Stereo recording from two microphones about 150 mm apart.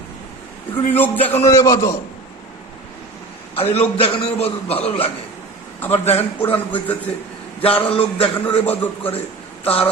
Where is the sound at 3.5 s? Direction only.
40° left (ahead or behind).